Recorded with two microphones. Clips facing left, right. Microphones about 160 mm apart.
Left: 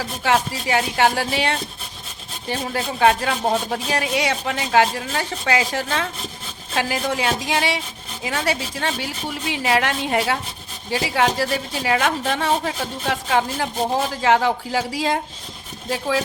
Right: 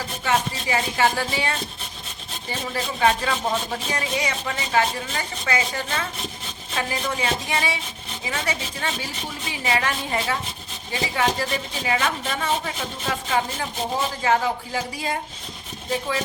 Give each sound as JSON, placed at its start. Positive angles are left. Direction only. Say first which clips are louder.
{"t": 0.7, "sound": "a woman's voice", "louder": "left 3 dB", "side_deg": 70}
{"t": 3.7, "sound": "a woman's voice", "louder": "left 4 dB", "side_deg": 75}